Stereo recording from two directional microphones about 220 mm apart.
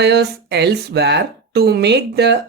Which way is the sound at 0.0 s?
50° right (ahead or behind).